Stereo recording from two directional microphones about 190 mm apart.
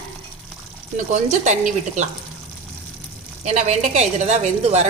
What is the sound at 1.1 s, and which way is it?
Speech, 40° right (ahead or behind).